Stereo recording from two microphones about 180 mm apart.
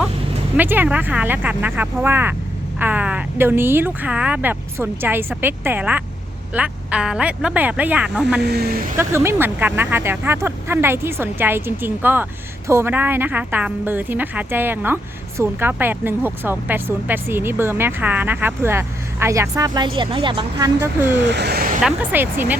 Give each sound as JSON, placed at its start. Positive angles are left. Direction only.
{"t": 0.5, "sound": "speech", "side_deg": -10}
{"t": 8.4, "sound": "speech", "side_deg": -65}
{"t": 9.0, "sound": "speech", "side_deg": -15}
{"t": 20.8, "sound": "speech", "side_deg": -10}
{"t": 21.2, "sound": "speech", "side_deg": -70}
{"t": 21.8, "sound": "speech", "side_deg": -5}